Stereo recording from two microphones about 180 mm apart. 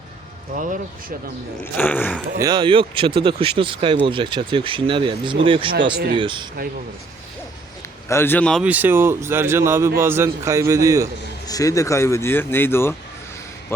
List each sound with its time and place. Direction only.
0.5 s speech: 50° right (ahead or behind)
1.6 s speech: 10° left (ahead or behind)
2.4 s speech: 25° right (ahead or behind)
8.0 s speech: 15° left (ahead or behind)
8.6 s speech: 10° right (ahead or behind)
11.4 s speech: 20° left (ahead or behind)